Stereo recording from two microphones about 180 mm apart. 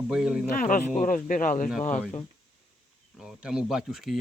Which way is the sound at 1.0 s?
45° left (ahead or behind).